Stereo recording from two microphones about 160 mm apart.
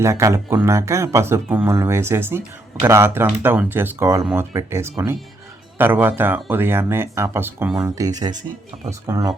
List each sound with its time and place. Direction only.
0.0 s speech: 20° right (ahead or behind)